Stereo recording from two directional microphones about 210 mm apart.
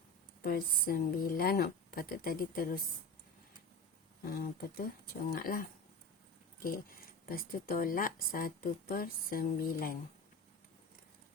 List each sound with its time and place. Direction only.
0.4 s speech: 45° left (ahead or behind)
4.3 s speech: 45° left (ahead or behind)